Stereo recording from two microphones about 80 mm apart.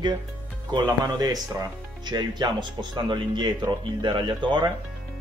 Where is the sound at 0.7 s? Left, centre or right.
Right.